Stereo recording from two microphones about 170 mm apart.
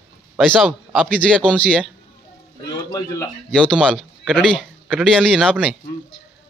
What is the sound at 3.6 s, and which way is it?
A man's voice, centre (ahead or behind).